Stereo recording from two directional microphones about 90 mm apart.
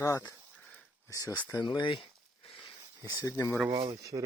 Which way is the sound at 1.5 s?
50° left (ahead or behind).